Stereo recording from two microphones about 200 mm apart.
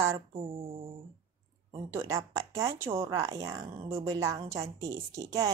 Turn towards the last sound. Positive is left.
turn(degrees=-15)  # may be behind; listen again after turning